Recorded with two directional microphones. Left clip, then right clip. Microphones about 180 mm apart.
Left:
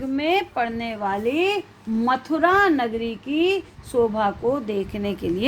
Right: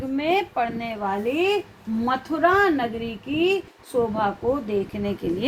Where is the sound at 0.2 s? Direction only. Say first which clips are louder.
Even; 40° left (ahead or behind); by 4.1 s 60° left (ahead or behind).